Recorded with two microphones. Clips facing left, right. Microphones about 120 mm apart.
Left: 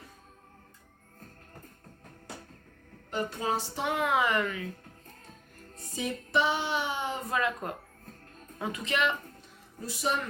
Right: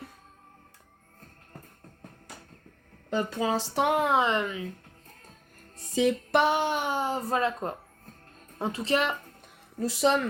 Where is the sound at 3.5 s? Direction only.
65° right (ahead or behind).